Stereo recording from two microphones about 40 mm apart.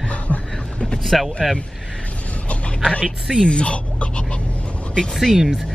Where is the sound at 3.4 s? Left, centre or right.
Left.